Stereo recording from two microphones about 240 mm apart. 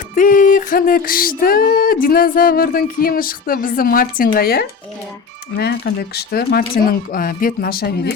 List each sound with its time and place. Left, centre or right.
0.1 s female singing: left
5.5 s speech: left